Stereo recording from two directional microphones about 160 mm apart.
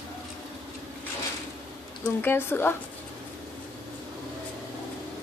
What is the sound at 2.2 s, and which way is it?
Speech, 15° left (ahead or behind).